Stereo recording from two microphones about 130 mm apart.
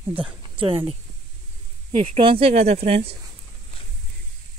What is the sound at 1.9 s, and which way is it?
Speech, 45° right (ahead or behind).